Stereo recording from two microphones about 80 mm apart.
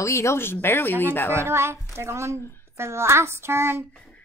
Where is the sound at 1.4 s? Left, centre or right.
Right.